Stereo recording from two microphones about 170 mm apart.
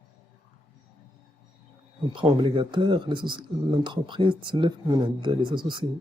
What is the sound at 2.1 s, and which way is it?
Speech, 30° right (ahead or behind).